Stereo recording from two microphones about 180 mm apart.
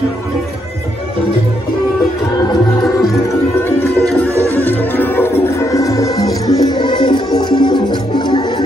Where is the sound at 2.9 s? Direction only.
15° left (ahead or behind).